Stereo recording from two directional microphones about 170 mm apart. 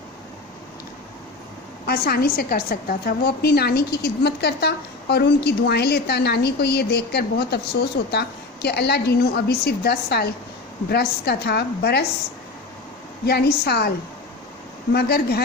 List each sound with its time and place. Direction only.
1.9 s a woman's voice: 65° left (ahead or behind)
13.2 s a woman's voice: 70° left (ahead or behind)
14.9 s a woman's voice: 70° left (ahead or behind)